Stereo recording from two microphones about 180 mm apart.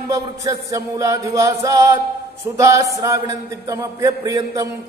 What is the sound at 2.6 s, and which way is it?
Speech, 15° right (ahead or behind).